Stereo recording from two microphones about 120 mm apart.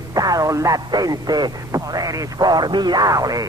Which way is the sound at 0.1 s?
30° right (ahead or behind).